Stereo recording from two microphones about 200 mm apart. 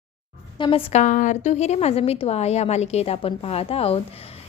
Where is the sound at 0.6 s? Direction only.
30° left (ahead or behind).